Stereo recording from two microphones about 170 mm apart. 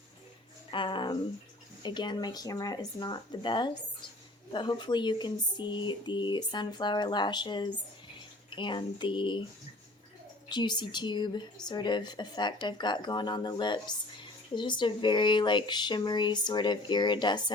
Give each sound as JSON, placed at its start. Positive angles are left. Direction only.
{"t": 0.7, "sound": "a sound", "side_deg": 30}
{"t": 1.8, "sound": "a woman's voice", "side_deg": 25}
{"t": 10.5, "sound": "a woman's voice", "side_deg": 25}